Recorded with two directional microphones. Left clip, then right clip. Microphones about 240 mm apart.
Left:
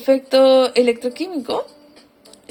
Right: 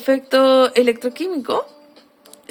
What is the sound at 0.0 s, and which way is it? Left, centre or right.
A woman's voice, centre.